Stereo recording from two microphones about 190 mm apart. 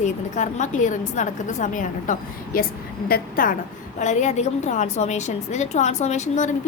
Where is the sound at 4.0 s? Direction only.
40° left (ahead or behind).